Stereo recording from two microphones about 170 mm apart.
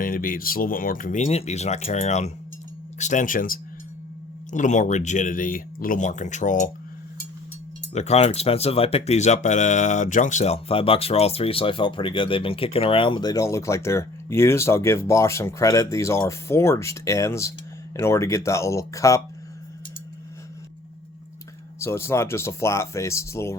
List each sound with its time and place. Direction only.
0.0 s speech: 55° left (ahead or behind)
7.9 s speech: 40° left (ahead or behind); by 19.2 s 20° left (ahead or behind)
21.8 s speech: 15° left (ahead or behind)